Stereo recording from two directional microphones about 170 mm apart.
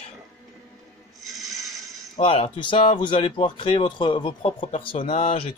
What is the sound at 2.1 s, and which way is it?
A man's voice, 35° left (ahead or behind).